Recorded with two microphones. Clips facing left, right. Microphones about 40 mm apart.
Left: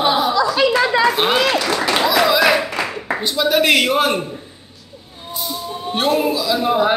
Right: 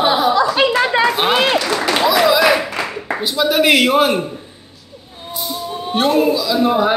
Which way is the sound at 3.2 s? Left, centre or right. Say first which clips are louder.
Right 2 dB; centre.